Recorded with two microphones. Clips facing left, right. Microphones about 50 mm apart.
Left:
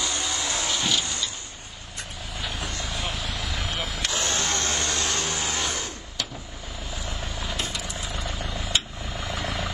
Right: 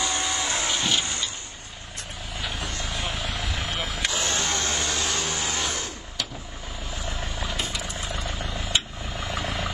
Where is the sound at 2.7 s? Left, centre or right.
Right.